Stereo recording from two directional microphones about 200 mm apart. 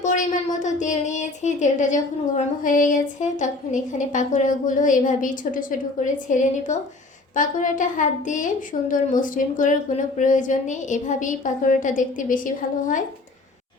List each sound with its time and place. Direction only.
0.0 s speech: 40° left (ahead or behind)